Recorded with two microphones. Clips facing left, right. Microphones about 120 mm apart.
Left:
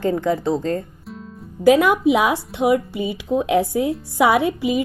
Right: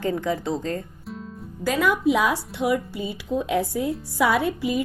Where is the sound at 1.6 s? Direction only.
65° left (ahead or behind).